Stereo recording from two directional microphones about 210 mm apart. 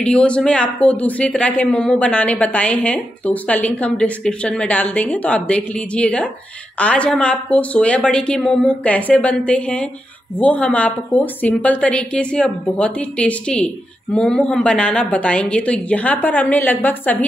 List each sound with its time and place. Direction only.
0.0 s a woman's voice: 5° left (ahead or behind)